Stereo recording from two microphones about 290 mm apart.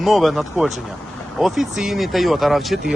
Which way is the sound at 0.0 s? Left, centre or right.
Centre.